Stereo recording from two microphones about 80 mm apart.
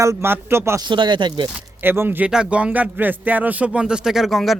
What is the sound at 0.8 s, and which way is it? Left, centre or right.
Speech, right.